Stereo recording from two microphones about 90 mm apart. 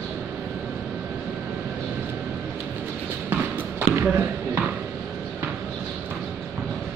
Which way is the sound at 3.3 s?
20° right (ahead or behind).